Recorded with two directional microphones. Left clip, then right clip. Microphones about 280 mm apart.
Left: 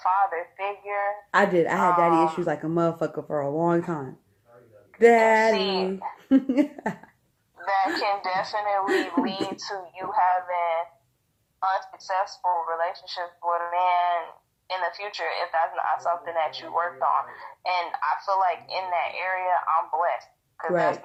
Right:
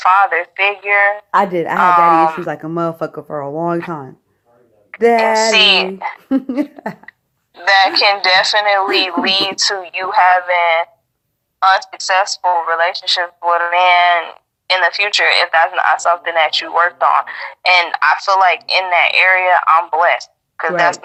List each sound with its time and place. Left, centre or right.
0.0 s speech: right
1.3 s speech: centre
1.8 s speech: right
2.4 s speech: centre
4.9 s speech: centre
5.5 s speech: right
6.1 s speech: centre
7.7 s speech: right
9.6 s speech: right
12.2 s speech: right